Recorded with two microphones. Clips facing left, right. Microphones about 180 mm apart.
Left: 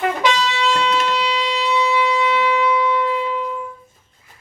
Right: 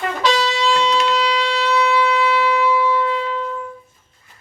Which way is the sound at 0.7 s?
50° left (ahead or behind).